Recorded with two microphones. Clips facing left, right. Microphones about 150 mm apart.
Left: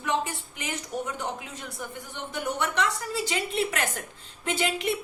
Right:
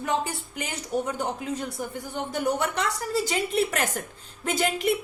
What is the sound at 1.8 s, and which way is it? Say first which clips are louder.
A woman's voice: right 5 dB; 35° right (ahead or behind).